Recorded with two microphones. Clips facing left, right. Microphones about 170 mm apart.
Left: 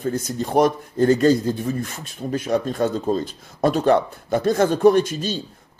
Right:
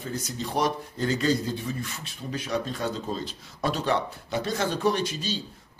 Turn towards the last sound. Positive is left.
turn(degrees=50)  # may be behind; listen again after turning